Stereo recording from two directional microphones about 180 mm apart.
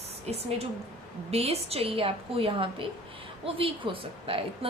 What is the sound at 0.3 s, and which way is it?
A woman's voice, 35° right (ahead or behind).